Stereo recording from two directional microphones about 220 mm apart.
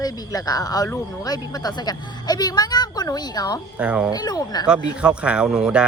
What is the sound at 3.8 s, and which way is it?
Speech, 5° right (ahead or behind).